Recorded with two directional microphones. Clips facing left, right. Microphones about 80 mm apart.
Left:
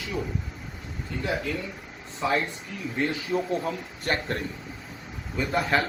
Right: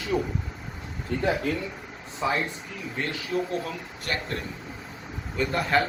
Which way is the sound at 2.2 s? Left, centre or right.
Centre.